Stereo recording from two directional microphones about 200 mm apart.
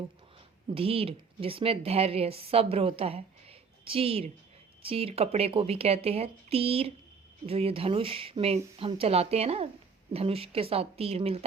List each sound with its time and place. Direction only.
0.7 s a woman's voice: 30° right (ahead or behind)